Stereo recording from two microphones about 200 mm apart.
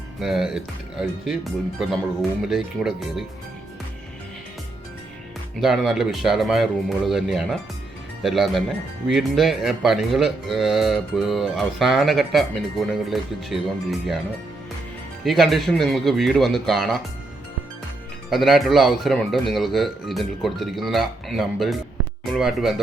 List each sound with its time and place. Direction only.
0.2 s speech: centre (ahead or behind)
5.5 s speech: centre (ahead or behind)
15.2 s speech: centre (ahead or behind)
18.3 s speech: centre (ahead or behind)